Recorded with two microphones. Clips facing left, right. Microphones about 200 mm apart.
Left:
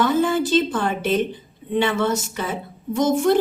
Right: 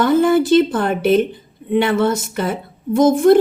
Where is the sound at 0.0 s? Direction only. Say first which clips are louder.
Right 5 dB; 55° right (ahead or behind).